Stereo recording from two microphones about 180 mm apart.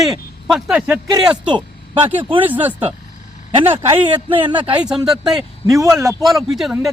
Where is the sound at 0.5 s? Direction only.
5° right (ahead or behind).